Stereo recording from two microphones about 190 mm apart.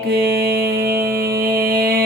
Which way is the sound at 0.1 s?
55° right (ahead or behind).